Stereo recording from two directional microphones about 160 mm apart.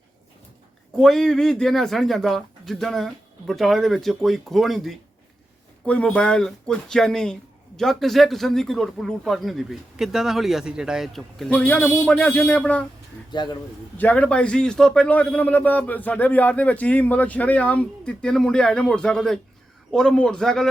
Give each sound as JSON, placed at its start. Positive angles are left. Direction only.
{"t": 0.9, "sound": "speech", "side_deg": 0}
{"t": 13.3, "sound": "speech", "side_deg": 25}
{"t": 14.0, "sound": "a man's voice", "side_deg": 10}